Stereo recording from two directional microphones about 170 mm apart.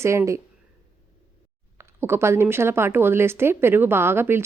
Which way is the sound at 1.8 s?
15° right (ahead or behind).